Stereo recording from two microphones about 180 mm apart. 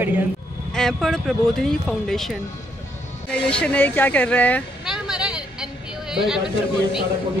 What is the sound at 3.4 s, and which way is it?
Speech, 5° left (ahead or behind).